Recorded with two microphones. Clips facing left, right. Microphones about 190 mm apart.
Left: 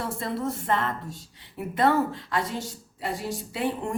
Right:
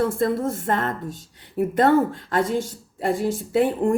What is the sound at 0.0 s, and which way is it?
Speech, 50° right (ahead or behind).